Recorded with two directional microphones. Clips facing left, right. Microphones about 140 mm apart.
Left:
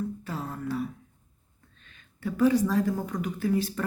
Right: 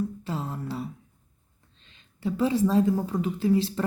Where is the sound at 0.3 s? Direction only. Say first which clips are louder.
Right 1 dB; 25° right (ahead or behind).